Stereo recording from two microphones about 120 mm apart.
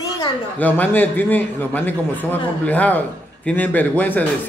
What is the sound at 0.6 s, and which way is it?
A man's voice, 15° left (ahead or behind).